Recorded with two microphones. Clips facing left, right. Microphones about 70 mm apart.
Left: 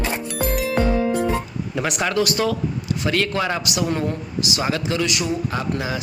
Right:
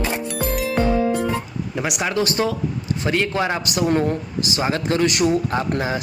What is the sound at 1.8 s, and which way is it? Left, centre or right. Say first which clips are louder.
Speech: left 1 dB; centre.